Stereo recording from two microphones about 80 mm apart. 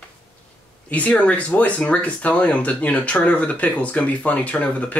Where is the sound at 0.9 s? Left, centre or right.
Centre.